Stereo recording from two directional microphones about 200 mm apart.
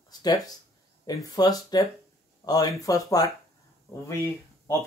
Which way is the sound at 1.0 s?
20° left (ahead or behind).